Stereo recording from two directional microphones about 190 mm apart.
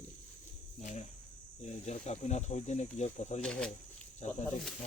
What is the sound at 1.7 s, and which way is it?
Speech, 35° left (ahead or behind).